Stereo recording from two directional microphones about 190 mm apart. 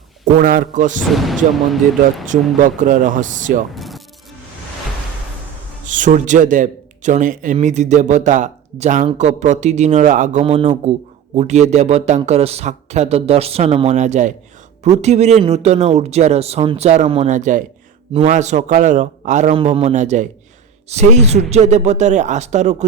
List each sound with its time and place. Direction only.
0.3 s speech: 45° right (ahead or behind)
1.1 s speech: centre (ahead or behind)
2.3 s speech: 45° right (ahead or behind)
3.8 s rub: centre (ahead or behind)
5.9 s speech: 40° right (ahead or behind)